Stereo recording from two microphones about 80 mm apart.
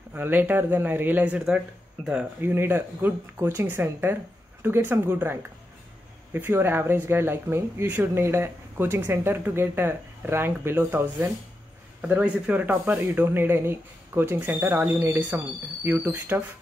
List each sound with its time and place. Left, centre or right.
0.1 s speech: right
2.4 s speech: right
12.0 s speech: centre